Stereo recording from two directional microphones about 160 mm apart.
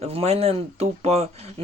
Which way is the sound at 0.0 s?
40° right (ahead or behind).